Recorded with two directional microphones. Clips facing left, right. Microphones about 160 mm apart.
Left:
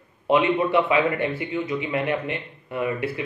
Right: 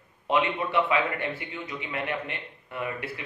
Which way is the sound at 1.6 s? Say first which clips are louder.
Left 7 dB; 15° left (ahead or behind).